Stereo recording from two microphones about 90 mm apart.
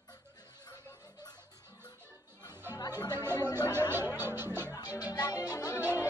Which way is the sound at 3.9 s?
25° right (ahead or behind).